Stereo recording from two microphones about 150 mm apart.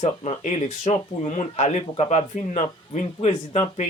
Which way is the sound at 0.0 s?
50° left (ahead or behind).